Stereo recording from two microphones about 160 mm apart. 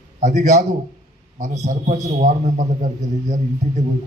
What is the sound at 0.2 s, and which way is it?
A man's voice, 50° right (ahead or behind).